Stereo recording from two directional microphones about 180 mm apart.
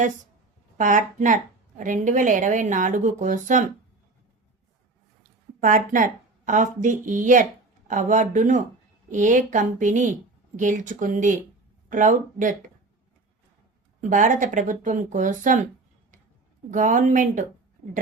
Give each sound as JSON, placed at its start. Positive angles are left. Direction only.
{"t": 0.8, "sound": "a woman's voice", "side_deg": -45}
{"t": 5.5, "sound": "a woman's voice", "side_deg": -50}
{"t": 14.1, "sound": "a woman's voice", "side_deg": -45}
{"t": 16.7, "sound": "a woman's voice", "side_deg": -45}